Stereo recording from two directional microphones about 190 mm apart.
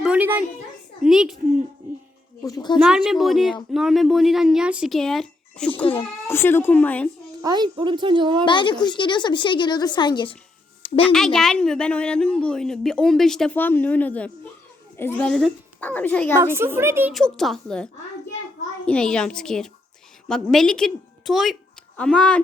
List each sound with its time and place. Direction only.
0.0 s a sound: 10° right (ahead or behind)
1.0 s a woman's voice: 5° right (ahead or behind)
2.4 s a woman's voice: 20° left (ahead or behind)
2.7 s a woman's voice: 5° right (ahead or behind)
5.7 s a woman's voice: 25° left (ahead or behind)
6.2 s speech: 10° left (ahead or behind)
7.4 s speech: 20° right (ahead or behind)
8.4 s a woman's voice: 25° left (ahead or behind)
11.0 s a woman's voice: 5° left (ahead or behind)
16.4 s a woman's voice: 15° right (ahead or behind)
17.2 s a woman's voice: centre (ahead or behind)
18.9 s a woman's voice: 5° left (ahead or behind)